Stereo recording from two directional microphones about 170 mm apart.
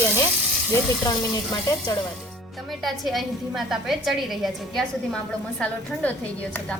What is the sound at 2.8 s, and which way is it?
A woman's voice, centre (ahead or behind).